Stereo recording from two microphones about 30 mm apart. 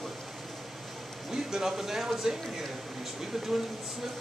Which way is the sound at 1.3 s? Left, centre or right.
Centre.